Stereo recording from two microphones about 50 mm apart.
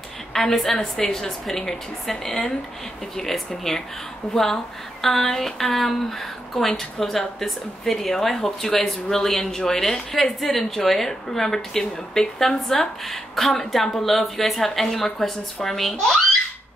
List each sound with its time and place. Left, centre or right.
0.3 s speech: centre
4.2 s speech: left
5.0 s a woman's voice: centre